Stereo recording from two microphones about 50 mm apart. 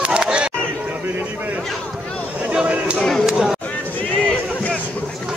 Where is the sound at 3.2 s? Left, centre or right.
Centre.